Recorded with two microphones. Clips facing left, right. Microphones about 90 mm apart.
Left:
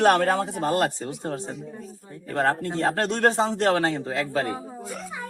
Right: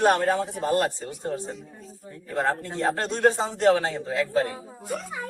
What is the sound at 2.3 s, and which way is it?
Speech, 65° left (ahead or behind).